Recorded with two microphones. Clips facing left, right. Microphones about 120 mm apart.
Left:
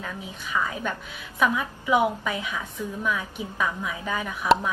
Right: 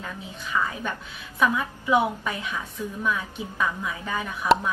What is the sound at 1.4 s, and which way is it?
A woman's voice, 15° left (ahead or behind).